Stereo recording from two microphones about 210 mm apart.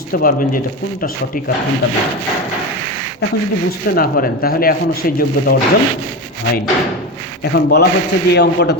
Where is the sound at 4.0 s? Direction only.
45° left (ahead or behind).